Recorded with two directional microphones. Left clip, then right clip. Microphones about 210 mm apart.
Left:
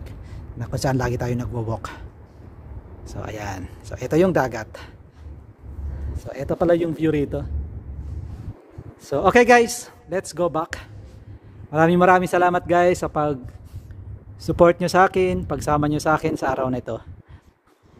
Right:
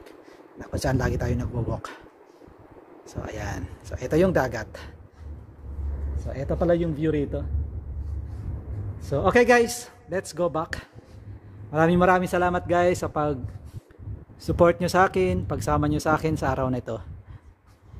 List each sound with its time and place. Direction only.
0.0 s speech: 20° left (ahead or behind)
3.1 s speech: 15° left (ahead or behind)
6.2 s a man's voice: 30° left (ahead or behind)
9.0 s speech: 25° left (ahead or behind); by 13.4 s 10° left (ahead or behind)
14.4 s speech: 10° left (ahead or behind)